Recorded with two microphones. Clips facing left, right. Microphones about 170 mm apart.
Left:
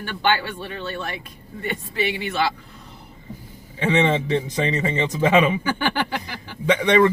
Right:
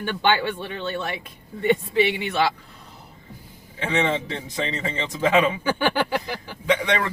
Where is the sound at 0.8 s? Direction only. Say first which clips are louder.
Right 2 dB; 20° right (ahead or behind).